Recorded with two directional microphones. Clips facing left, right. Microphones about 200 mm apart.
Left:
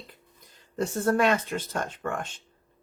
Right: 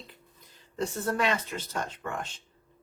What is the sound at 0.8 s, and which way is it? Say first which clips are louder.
Speech: left 5 dB; 50° left (ahead or behind).